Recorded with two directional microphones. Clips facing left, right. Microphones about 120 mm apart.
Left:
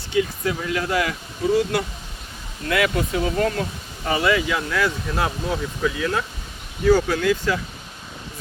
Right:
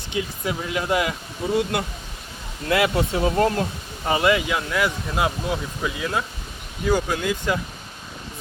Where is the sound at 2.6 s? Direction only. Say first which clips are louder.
Right 1 dB; 30° right (ahead or behind).